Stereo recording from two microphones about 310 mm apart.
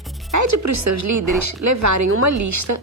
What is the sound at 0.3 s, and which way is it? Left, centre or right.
Speech, right.